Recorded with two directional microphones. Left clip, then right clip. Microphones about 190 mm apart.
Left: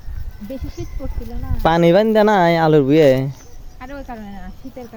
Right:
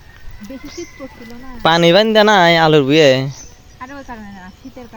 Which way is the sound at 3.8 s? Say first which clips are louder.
Right 1 dB; 20° left (ahead or behind).